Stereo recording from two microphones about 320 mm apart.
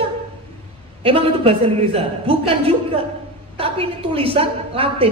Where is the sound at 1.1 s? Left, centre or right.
Centre.